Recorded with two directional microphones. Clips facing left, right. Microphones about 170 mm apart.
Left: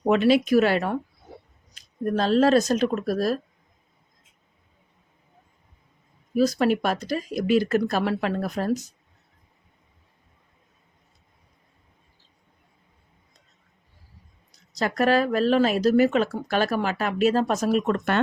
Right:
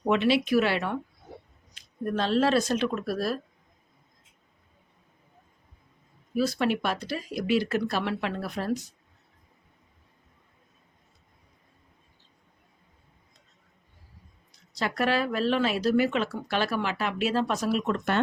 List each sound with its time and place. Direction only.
0.0 s speech: 40° left (ahead or behind)
6.3 s speech: 40° left (ahead or behind)
14.7 s speech: 45° left (ahead or behind)